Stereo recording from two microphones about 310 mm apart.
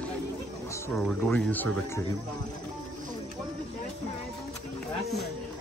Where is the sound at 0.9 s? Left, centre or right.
Centre.